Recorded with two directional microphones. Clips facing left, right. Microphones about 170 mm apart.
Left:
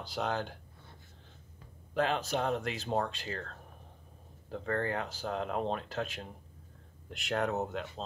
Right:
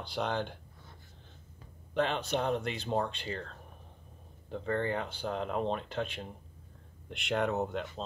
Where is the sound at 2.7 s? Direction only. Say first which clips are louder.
Even; 40° left (ahead or behind).